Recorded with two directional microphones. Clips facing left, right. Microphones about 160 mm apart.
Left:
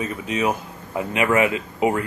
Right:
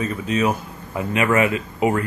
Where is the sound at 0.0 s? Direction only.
15° left (ahead or behind).